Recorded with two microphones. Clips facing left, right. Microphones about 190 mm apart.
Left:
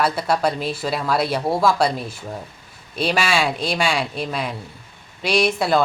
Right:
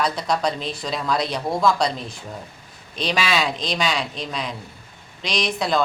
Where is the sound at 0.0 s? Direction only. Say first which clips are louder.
Left 3 dB; 5° left (ahead or behind).